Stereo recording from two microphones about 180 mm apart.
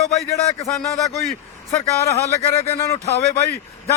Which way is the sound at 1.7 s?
15° left (ahead or behind).